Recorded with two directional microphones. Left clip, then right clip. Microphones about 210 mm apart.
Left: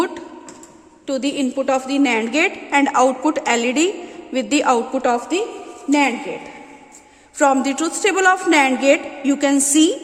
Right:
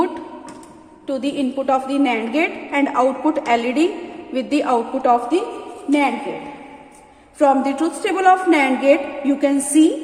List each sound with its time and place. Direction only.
1.0 s a woman's voice: 50° left (ahead or behind)
7.3 s a woman's voice: 55° left (ahead or behind)